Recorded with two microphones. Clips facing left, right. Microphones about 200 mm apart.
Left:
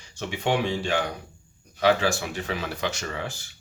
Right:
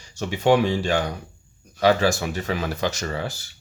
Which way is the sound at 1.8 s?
40° right (ahead or behind).